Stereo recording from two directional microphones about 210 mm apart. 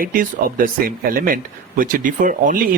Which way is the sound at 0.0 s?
40° right (ahead or behind).